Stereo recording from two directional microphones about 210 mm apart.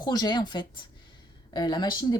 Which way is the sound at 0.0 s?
20° left (ahead or behind).